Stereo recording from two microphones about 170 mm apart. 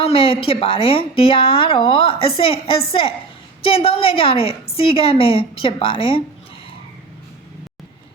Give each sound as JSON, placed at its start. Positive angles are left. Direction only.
{"t": 0.0, "sound": "a woman's voice", "side_deg": 35}